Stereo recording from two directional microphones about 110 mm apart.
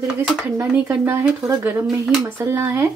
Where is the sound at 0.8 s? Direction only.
20° right (ahead or behind).